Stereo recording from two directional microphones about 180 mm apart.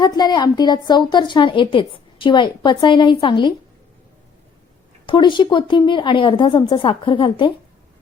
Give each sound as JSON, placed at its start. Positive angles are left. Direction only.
{"t": 0.0, "sound": "a woman's voice", "side_deg": 25}
{"t": 5.0, "sound": "a woman's voice", "side_deg": 25}